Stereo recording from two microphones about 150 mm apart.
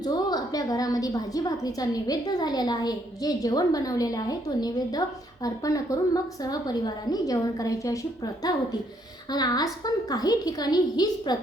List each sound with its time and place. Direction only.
0.0 s a woman's voice: 25° left (ahead or behind)